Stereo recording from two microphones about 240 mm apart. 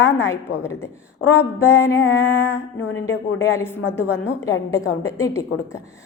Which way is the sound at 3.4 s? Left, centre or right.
Centre.